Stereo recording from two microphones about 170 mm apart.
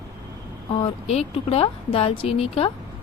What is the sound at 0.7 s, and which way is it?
Speech, 35° left (ahead or behind).